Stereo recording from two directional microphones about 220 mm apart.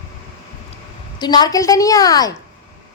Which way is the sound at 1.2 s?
20° left (ahead or behind).